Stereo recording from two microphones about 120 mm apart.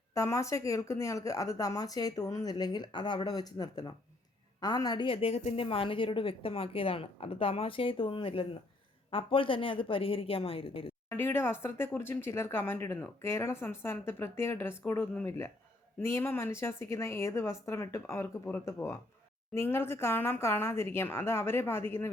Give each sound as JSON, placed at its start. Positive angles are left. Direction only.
{"t": 0.1, "sound": "a woman's voice", "side_deg": 25}
{"t": 11.1, "sound": "speech", "side_deg": 20}